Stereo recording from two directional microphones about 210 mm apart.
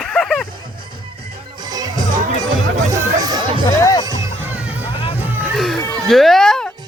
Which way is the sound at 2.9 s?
20° right (ahead or behind).